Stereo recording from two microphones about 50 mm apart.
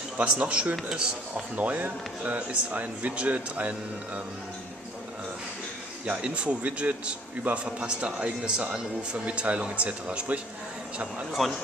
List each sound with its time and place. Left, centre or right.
0.2 s a man's voice: right
1.6 s a man's voice: right
6.0 s a man's voice: right
11.4 s speech: centre